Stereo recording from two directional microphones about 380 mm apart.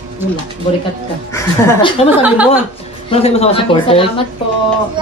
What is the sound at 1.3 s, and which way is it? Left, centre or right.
Speech, centre.